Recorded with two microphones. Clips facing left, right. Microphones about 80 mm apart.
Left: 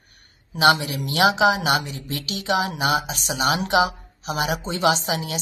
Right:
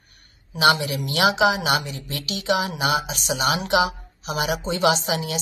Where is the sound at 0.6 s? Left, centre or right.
Left.